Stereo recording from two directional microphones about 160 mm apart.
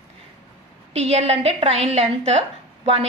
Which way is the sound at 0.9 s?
40° right (ahead or behind).